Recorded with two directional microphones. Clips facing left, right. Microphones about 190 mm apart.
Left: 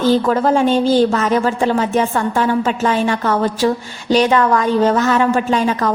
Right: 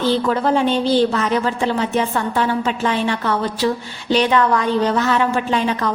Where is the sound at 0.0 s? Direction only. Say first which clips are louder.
Left 4 dB; 45° left (ahead or behind).